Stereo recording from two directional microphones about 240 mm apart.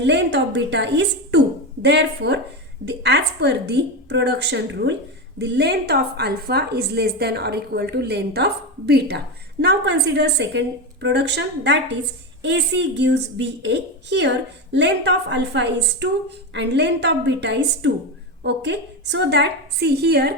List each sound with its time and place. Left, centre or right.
0.0 s a woman's voice: right